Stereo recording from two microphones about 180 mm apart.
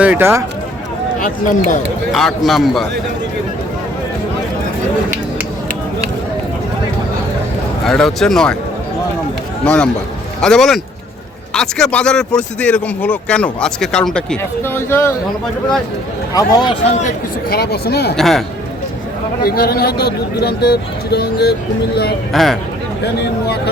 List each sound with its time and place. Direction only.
0.0 s speech: 10° right (ahead or behind)
1.2 s speech: 45° left (ahead or behind)
2.1 s speech: centre (ahead or behind)
7.9 s speech: centre (ahead or behind)
9.6 s speech: 5° left (ahead or behind)
16.3 s a man's voice: 20° left (ahead or behind)
17.5 s speech: 60° left (ahead or behind)
18.2 s speech: centre (ahead or behind)
19.4 s speech: 55° left (ahead or behind)
22.3 s speech: centre (ahead or behind)